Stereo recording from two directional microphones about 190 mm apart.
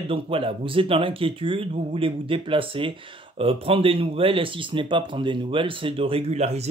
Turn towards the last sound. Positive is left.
turn(degrees=-35)  # may be behind; listen again after turning